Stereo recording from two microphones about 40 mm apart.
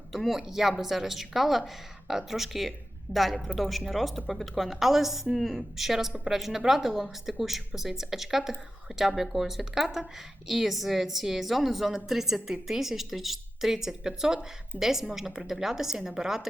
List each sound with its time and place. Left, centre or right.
0.3 s a woman's voice: centre